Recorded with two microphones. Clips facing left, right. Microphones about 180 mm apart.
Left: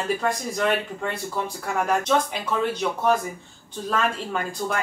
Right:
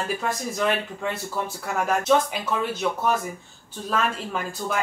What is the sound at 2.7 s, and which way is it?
Speech, 5° right (ahead or behind).